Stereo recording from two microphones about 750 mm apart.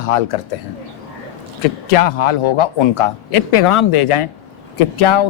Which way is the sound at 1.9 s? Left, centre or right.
Left.